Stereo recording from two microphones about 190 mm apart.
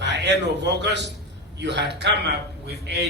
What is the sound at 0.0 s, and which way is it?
A man's voice, 65° right (ahead or behind).